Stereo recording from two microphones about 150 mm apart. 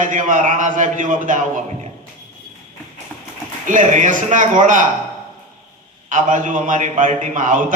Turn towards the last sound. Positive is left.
turn(degrees=-60)  # may be behind; listen again after turning